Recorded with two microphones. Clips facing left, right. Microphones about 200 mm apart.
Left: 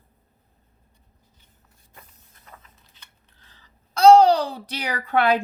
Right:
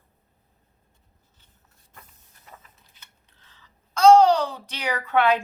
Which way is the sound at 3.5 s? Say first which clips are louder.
Left 1 dB; 35° left (ahead or behind).